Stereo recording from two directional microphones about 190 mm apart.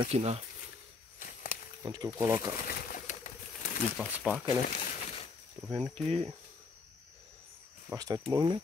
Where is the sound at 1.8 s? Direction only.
20° right (ahead or behind).